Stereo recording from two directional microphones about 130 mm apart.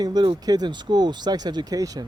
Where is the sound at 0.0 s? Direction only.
35° right (ahead or behind).